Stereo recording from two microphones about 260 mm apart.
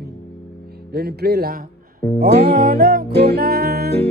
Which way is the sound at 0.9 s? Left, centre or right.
Right.